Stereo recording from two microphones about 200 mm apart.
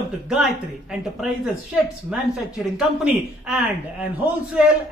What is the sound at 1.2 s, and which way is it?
A woman's voice, 5° right (ahead or behind).